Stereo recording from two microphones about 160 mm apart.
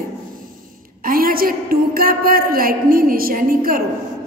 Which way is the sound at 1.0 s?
65° right (ahead or behind).